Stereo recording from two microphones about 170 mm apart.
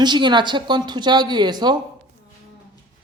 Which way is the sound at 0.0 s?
25° right (ahead or behind).